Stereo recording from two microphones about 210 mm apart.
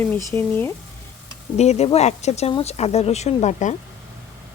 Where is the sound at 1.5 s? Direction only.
30° left (ahead or behind).